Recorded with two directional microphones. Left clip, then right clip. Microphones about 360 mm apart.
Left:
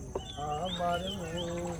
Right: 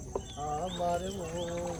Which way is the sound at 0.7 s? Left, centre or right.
Right.